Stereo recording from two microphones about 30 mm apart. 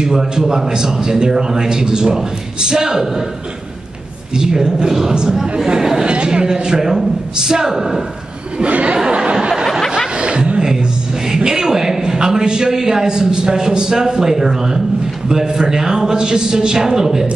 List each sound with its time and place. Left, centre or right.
0.0 s a man's voice: centre
4.4 s a man's voice: right
5.3 s speech: centre
6.0 s a man's voice: right; by 8.0 s centre
8.6 s speech: right
8.9 s a sound: right
11.2 s a man's voice: right